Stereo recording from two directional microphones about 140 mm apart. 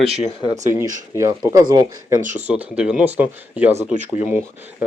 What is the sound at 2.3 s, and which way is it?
Speech, 10° right (ahead or behind).